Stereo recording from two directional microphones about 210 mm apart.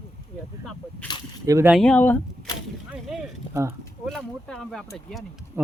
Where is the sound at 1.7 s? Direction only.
5° left (ahead or behind).